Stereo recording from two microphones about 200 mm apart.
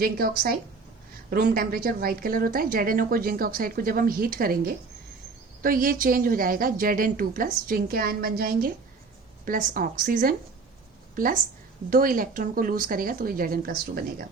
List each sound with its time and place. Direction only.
0.0 s a woman's voice: 50° right (ahead or behind)